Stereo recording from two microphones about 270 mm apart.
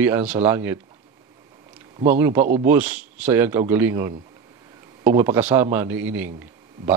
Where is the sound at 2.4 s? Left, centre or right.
Right.